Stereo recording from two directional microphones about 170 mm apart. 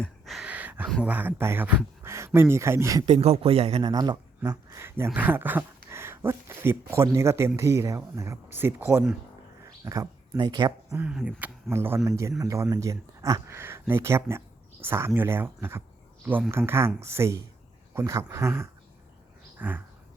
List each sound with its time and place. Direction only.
0.0 s a sound: centre (ahead or behind)
1.0 s speech: 10° right (ahead or behind)
3.1 s speech: 35° right (ahead or behind)
3.8 s speech: 25° right (ahead or behind)
10.9 s speech: 5° right (ahead or behind)
19.5 s bird: 10° right (ahead or behind)